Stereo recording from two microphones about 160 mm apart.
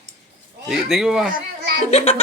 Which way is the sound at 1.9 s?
40° left (ahead or behind).